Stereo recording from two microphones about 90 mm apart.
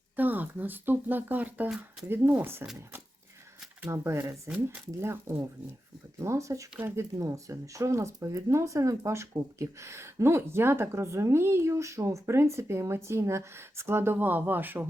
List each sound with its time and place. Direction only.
0.2 s speech: 20° right (ahead or behind)
3.8 s speech: 30° right (ahead or behind)